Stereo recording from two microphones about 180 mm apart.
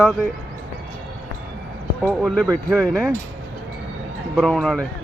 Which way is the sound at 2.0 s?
5° left (ahead or behind).